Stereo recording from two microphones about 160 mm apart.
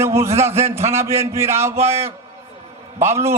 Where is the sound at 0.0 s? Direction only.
15° right (ahead or behind).